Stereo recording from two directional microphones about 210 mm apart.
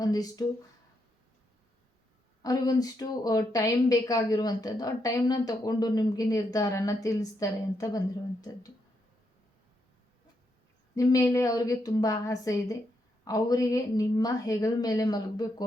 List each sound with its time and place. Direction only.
0.0 s a woman's voice: 15° left (ahead or behind)
2.4 s a woman's voice: 15° left (ahead or behind)
10.9 s a woman's voice: 15° left (ahead or behind)